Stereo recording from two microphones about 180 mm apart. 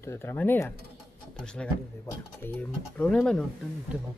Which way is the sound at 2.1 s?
20° left (ahead or behind).